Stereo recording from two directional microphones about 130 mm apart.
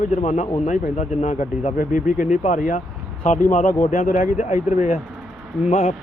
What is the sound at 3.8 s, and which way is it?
Speech, 60° left (ahead or behind).